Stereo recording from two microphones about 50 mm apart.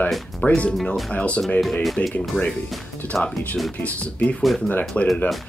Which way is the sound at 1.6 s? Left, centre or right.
Centre.